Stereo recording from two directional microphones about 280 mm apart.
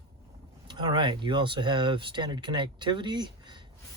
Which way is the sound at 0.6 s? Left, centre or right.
Centre.